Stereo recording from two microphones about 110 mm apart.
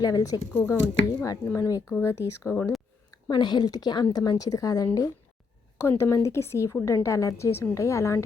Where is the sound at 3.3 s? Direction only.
40° left (ahead or behind).